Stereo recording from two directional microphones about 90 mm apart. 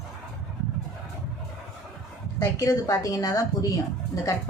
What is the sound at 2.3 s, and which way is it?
Speech, 40° left (ahead or behind).